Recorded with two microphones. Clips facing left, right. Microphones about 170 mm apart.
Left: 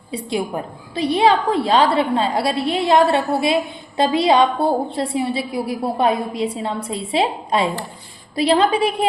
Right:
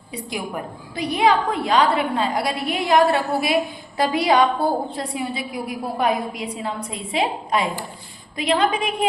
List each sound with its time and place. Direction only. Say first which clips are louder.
0.1 s a woman's voice: left 6 dB; 30° left (ahead or behind)